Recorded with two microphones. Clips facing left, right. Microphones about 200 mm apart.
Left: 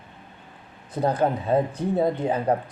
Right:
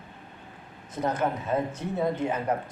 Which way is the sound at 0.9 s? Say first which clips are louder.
Left 5 dB; 35° left (ahead or behind).